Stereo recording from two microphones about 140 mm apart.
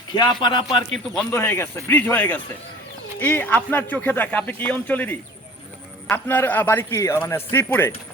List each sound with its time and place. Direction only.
0.1 s speech: 35° left (ahead or behind)
1.3 s speech: 15° left (ahead or behind)